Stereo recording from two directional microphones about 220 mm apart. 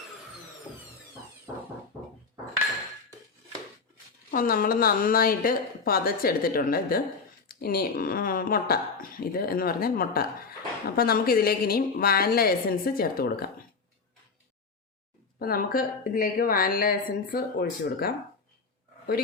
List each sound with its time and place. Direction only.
4.3 s a woman's voice: 40° left (ahead or behind)
15.4 s a woman's voice: 40° left (ahead or behind)